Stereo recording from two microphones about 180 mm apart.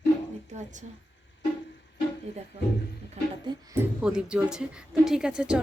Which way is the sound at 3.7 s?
5° right (ahead or behind).